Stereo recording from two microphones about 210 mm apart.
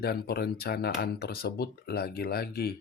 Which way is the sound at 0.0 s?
50° left (ahead or behind).